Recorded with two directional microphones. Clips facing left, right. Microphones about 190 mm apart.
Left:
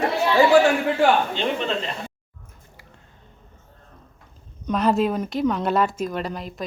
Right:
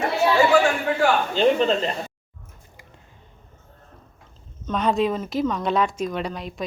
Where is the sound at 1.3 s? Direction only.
40° right (ahead or behind).